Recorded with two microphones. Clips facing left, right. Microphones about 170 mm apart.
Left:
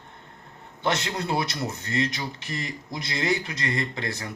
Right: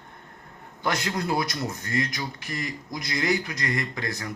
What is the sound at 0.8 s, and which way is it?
Speech, 25° left (ahead or behind).